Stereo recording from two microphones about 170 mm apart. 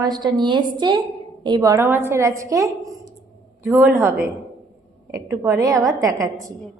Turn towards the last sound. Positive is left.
turn(degrees=-20)  # may be behind; listen again after turning